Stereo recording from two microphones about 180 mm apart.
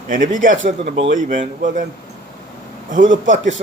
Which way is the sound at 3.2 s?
45° right (ahead or behind).